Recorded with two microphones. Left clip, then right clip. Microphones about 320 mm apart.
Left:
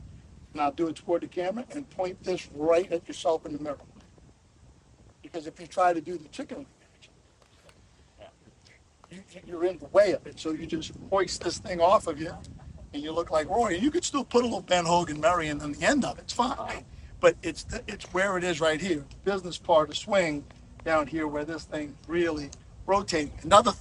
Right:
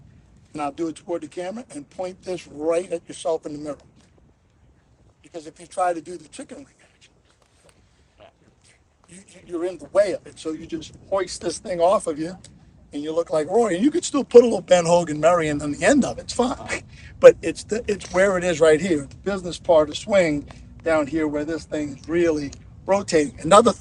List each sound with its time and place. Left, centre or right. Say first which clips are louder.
0.5 s speech: right 1 dB; centre
5.3 s speech: right 1 dB; centre
9.1 s speech: right 6 dB; centre
20.3 s a sound: right 8 dB; left
20.8 s speech: right 6 dB; centre